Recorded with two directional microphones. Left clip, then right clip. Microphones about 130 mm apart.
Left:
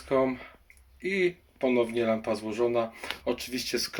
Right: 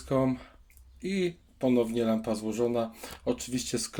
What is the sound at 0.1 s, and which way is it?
Speech, 40° right (ahead or behind).